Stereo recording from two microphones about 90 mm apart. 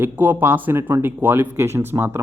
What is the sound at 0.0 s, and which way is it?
Speech, 20° right (ahead or behind).